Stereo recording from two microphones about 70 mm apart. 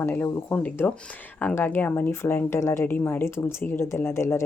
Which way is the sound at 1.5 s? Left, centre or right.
Left.